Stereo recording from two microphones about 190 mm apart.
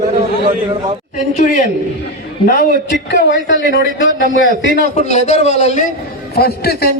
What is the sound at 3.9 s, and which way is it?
Speech, 90° left.